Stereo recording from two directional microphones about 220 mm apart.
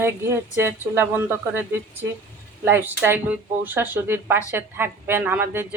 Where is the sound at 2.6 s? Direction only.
10° right (ahead or behind).